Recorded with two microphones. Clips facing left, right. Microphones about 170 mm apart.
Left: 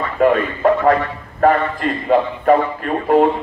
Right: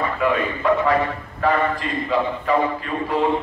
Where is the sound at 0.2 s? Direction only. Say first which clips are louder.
Left 9 dB; 45° left (ahead or behind).